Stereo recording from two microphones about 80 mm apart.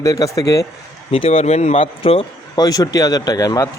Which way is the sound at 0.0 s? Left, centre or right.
Left.